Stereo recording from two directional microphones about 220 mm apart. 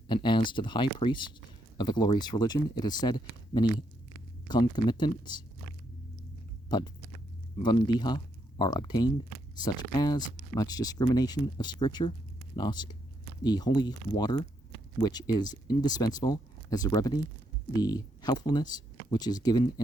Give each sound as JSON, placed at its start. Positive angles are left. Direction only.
{"t": 0.1, "sound": "speech", "side_deg": 20}
{"t": 6.7, "sound": "a sound", "side_deg": 20}
{"t": 7.6, "sound": "speech", "side_deg": 20}